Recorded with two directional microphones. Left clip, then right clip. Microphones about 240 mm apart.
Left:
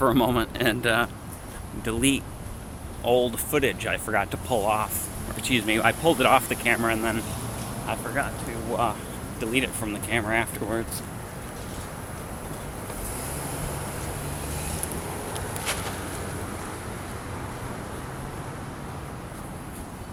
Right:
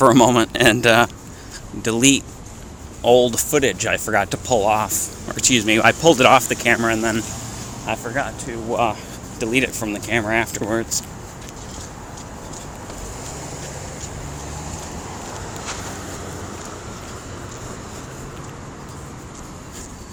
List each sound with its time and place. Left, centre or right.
0.0 s speech: right